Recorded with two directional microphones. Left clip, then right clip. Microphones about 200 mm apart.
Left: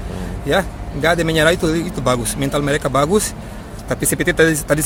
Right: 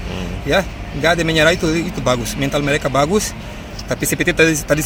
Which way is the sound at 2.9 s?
25° left (ahead or behind).